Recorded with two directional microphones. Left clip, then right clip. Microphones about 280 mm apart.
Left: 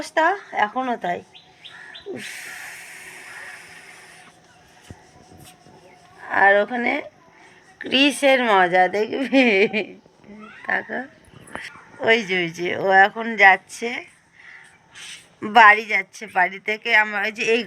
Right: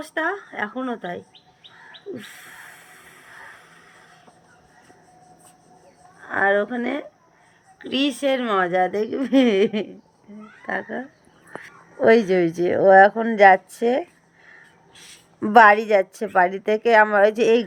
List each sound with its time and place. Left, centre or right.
0.0 s speech: centre
2.1 s a sound: centre
6.2 s speech: centre
11.6 s a sound: right
12.3 s a woman's voice: right
15.4 s a woman's voice: centre